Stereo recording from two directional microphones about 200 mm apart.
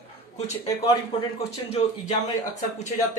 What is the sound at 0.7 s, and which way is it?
Speech, 15° left (ahead or behind).